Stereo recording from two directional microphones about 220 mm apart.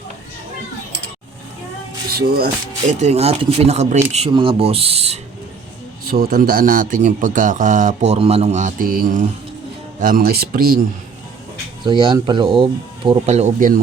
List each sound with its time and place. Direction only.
2.0 s speech: 45° right (ahead or behind)
3.0 s speech: 30° right (ahead or behind)
6.1 s speech: 40° right (ahead or behind)
11.8 s speech: 20° right (ahead or behind)